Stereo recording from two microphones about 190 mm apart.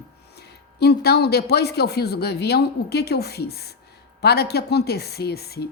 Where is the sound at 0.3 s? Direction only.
60° left (ahead or behind).